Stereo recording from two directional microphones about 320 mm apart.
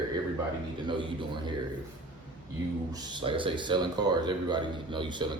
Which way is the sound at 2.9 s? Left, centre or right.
Centre.